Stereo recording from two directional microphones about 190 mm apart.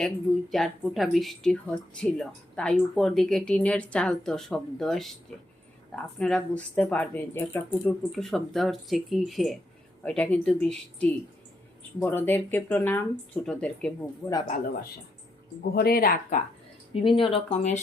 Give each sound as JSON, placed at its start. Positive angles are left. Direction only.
{"t": 0.5, "sound": "speech", "side_deg": 0}
{"t": 14.4, "sound": "speech", "side_deg": 40}
{"t": 15.7, "sound": "speech", "side_deg": 55}
{"t": 16.9, "sound": "speech", "side_deg": 25}